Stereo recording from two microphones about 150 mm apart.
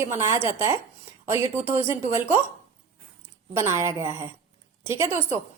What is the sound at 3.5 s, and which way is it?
A woman's voice, 20° right (ahead or behind).